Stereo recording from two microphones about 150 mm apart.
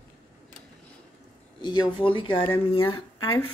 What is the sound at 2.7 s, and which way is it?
Speech, 35° left (ahead or behind).